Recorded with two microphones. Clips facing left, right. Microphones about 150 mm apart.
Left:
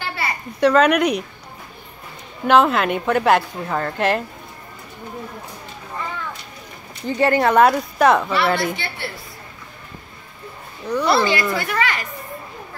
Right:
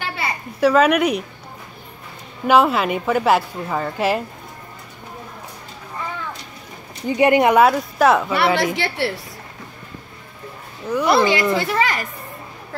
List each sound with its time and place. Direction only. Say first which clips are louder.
0.0 s a sound: even; 20° right (ahead or behind)
0.6 s a woman's voice: even; 5° right (ahead or behind)
2.4 s a woman's voice: even; 5° right (ahead or behind)
7.1 s speech: right 3 dB; 15° right (ahead or behind)
7.6 s a woman's voice: even; centre (ahead or behind)
8.7 s a woman's voice: right 8 dB; 75° right (ahead or behind)
10.9 s speech: right 2 dB; 10° right (ahead or behind); by 11.9 s 25° right (ahead or behind)